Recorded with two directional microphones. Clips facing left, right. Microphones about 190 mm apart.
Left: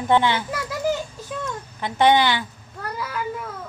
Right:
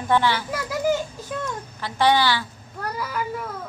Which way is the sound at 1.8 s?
20° left (ahead or behind).